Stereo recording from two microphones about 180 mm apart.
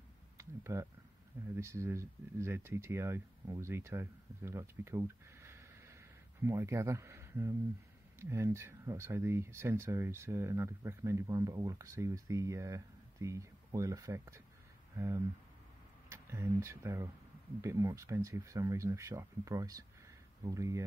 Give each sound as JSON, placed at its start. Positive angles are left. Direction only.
{"t": 0.4, "sound": "a sound", "side_deg": -15}
{"t": 1.5, "sound": "speech", "side_deg": -15}
{"t": 16.1, "sound": "speech", "side_deg": -15}